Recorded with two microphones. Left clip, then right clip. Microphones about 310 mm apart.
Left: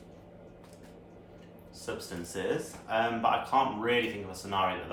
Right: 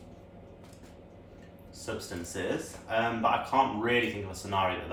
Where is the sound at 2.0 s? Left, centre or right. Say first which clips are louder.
Right 1 dB; centre.